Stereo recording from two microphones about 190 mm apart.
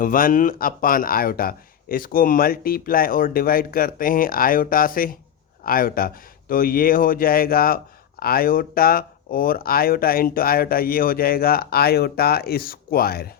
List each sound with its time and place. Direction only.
0.0 s speech: 45° left (ahead or behind)